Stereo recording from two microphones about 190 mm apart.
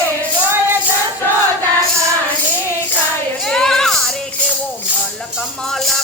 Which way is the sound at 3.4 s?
5° left (ahead or behind).